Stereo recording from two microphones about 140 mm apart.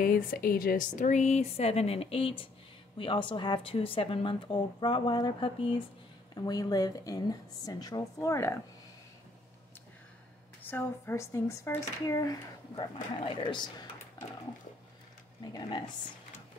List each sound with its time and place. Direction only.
0.0 s speech: 90° left; by 5.9 s 40° left (ahead or behind)
6.3 s speech: 25° left (ahead or behind)
10.7 s speech: 15° left (ahead or behind); by 13.8 s 35° left (ahead or behind)
15.4 s speech: 30° left (ahead or behind)